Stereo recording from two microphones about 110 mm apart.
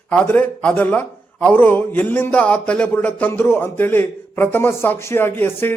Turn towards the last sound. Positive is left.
turn(degrees=20)  # may be behind; listen again after turning